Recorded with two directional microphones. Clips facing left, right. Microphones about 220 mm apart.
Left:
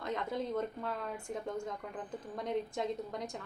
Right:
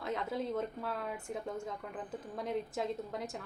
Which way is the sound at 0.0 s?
Centre (ahead or behind).